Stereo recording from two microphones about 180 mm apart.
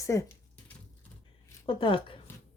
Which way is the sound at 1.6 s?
30° left (ahead or behind).